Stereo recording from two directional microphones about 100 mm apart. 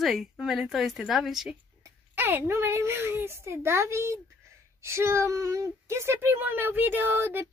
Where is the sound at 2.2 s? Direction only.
25° right (ahead or behind).